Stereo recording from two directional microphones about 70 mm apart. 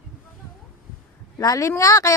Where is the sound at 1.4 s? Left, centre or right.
Left.